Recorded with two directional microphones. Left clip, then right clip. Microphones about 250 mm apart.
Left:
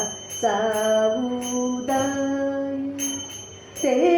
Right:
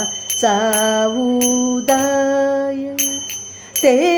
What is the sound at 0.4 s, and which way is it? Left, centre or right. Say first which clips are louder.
Music: right 5 dB; right.